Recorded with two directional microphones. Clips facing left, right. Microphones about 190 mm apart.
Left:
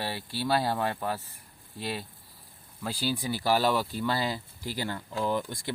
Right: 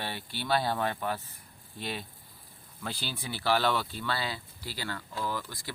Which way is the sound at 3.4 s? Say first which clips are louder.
Left 2 dB; 10° left (ahead or behind).